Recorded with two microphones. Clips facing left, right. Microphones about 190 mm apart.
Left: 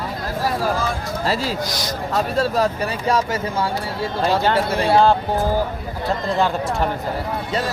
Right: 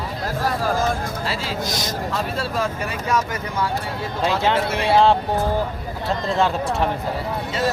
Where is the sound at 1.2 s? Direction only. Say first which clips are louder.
Left 7 dB; 40° left (ahead or behind).